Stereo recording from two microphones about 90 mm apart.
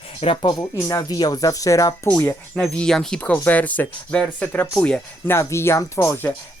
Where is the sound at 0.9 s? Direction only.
40° left (ahead or behind).